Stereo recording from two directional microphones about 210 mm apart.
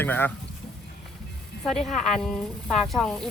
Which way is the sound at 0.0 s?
10° left (ahead or behind).